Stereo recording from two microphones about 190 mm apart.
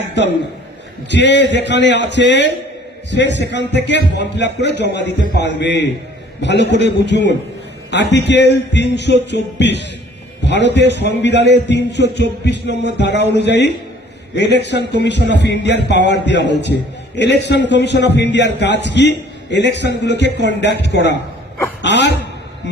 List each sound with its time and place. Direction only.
1.1 s a man's voice: 65° left (ahead or behind)